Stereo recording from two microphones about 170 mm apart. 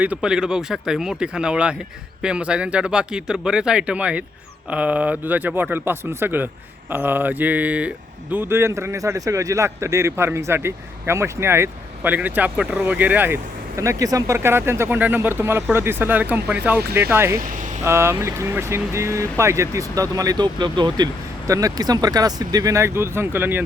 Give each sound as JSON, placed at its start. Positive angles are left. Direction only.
{"t": 0.0, "sound": "speech", "side_deg": -5}